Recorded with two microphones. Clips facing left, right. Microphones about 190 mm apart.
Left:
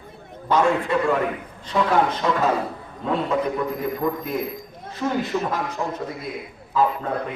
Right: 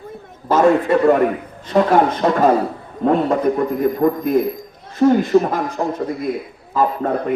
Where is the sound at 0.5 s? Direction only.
45° right (ahead or behind).